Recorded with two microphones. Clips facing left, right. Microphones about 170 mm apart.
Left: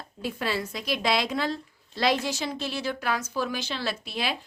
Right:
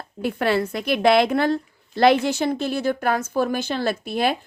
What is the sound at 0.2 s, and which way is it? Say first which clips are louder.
A woman's voice: right 8 dB; 60° right (ahead or behind).